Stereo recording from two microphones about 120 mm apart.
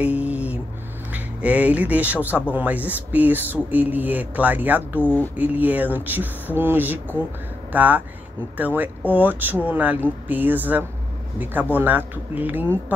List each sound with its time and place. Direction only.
0.0 s a sound: 10° right (ahead or behind)
1.1 s speech: 15° right (ahead or behind)
5.0 s speech: 15° left (ahead or behind)
5.4 s speech: 15° right (ahead or behind)